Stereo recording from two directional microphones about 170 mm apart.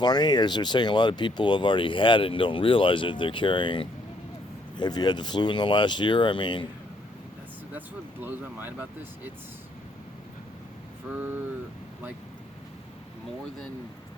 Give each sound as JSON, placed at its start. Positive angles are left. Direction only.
{"t": 0.0, "sound": "speech", "side_deg": 25}
{"t": 7.8, "sound": "speech", "side_deg": -10}